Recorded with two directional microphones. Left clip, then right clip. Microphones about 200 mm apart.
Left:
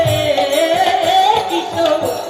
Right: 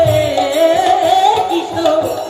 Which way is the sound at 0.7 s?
45° right (ahead or behind).